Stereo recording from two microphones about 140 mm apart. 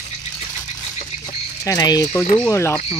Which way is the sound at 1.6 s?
25° left (ahead or behind).